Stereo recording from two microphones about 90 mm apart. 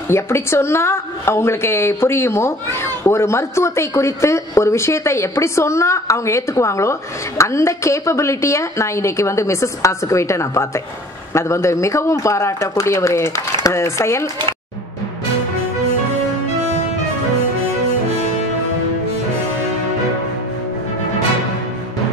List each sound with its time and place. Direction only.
0.1 s a woman's voice: 30° left (ahead or behind)